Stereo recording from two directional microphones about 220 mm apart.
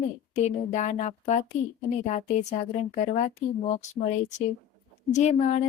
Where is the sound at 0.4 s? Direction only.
30° left (ahead or behind).